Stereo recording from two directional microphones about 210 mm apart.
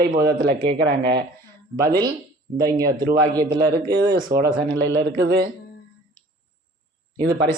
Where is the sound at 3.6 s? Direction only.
45° right (ahead or behind).